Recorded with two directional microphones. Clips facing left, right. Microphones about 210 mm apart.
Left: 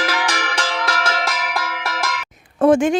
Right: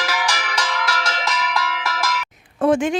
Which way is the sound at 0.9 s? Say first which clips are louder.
Left 2 dB; 55° left (ahead or behind).